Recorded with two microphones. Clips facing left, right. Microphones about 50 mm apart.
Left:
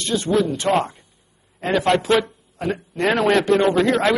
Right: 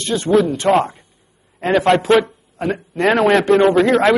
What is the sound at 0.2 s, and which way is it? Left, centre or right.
Speech, centre.